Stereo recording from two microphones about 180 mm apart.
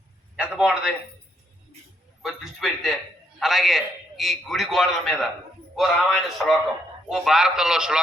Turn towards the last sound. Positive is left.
turn(degrees=-5)  # may be behind; listen again after turning